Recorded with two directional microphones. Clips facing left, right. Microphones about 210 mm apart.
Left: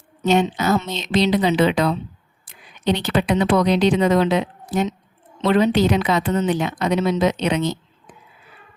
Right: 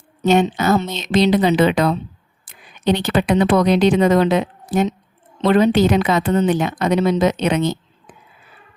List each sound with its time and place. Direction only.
0.3 s a woman's voice: 50° right (ahead or behind)